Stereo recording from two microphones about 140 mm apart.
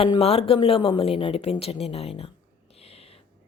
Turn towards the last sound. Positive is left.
turn(degrees=45)  # may be behind; listen again after turning